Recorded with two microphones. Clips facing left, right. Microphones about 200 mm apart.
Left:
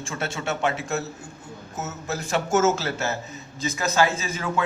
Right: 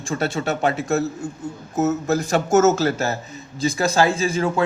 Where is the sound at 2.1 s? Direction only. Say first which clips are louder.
Right 1 dB; 40° right (ahead or behind).